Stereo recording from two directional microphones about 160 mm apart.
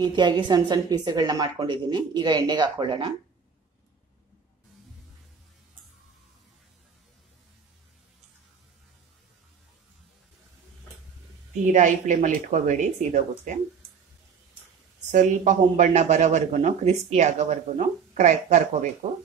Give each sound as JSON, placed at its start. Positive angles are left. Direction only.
{"t": 0.0, "sound": "a woman's voice", "side_deg": -25}
{"t": 11.6, "sound": "speech", "side_deg": -50}
{"t": 15.0, "sound": "speech", "side_deg": -50}